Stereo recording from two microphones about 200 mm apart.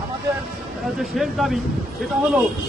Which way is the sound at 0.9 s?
Centre (ahead or behind).